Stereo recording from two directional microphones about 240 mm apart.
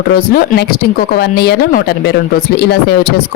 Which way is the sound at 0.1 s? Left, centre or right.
Left.